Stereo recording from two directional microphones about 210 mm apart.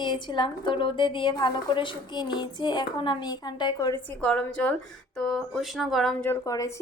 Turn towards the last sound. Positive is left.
turn(degrees=15)  # may be behind; listen again after turning